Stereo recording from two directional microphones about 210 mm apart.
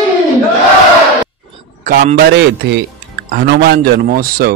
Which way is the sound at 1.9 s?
40° right (ahead or behind).